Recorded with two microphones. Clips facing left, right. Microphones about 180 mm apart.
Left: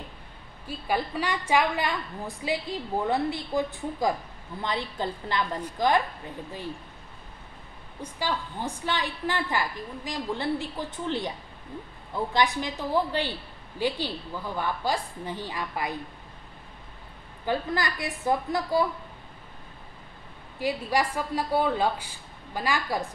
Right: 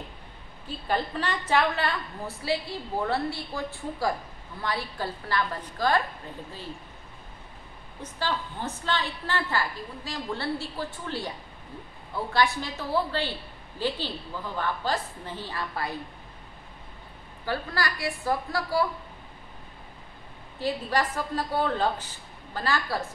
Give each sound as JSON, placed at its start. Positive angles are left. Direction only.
{"t": 0.7, "sound": "a woman's voice", "side_deg": 10}
{"t": 8.0, "sound": "a woman's voice", "side_deg": 10}
{"t": 17.5, "sound": "a woman's voice", "side_deg": 20}
{"t": 20.5, "sound": "a woman's voice", "side_deg": 10}